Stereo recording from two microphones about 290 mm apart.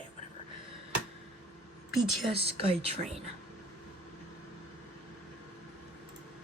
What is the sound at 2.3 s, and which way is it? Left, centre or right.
Speech, centre.